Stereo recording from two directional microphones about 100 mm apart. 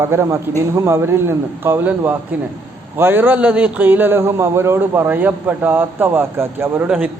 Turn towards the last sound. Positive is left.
turn(degrees=-25)  # may be behind; listen again after turning